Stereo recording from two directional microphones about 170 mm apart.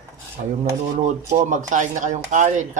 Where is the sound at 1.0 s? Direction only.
45° right (ahead or behind).